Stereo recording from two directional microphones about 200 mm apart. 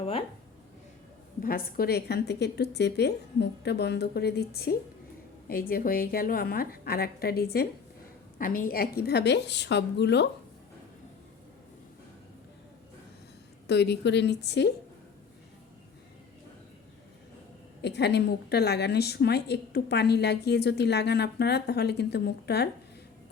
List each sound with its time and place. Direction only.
0.0 s speech: 30° left (ahead or behind)
1.4 s a woman's voice: 45° left (ahead or behind)
13.7 s a woman's voice: 55° left (ahead or behind)
17.8 s a woman's voice: 55° left (ahead or behind)